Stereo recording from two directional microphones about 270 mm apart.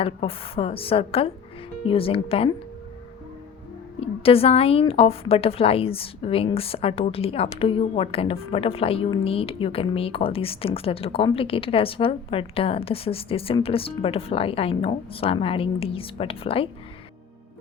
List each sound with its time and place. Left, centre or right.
0.0 s a woman's voice: left
4.0 s a woman's voice: left